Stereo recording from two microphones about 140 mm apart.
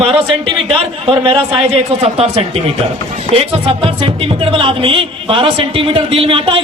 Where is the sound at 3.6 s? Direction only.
40° right (ahead or behind).